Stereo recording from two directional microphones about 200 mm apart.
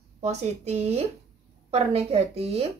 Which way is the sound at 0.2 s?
35° right (ahead or behind).